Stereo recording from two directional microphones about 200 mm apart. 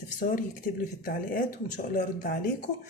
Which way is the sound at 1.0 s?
45° left (ahead or behind).